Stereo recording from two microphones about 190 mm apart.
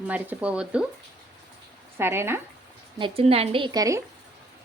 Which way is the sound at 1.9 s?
10° right (ahead or behind).